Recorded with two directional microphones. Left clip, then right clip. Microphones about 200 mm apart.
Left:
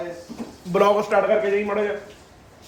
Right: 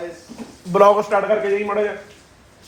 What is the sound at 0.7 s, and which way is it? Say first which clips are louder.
Speech: right 4 dB; 10° right (ahead or behind).